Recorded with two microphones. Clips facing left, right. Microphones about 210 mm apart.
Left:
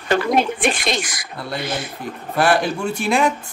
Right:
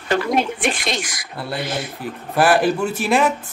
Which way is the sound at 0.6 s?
55° left (ahead or behind).